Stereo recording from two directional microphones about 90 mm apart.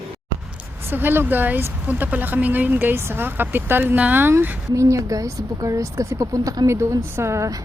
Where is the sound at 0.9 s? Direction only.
25° right (ahead or behind).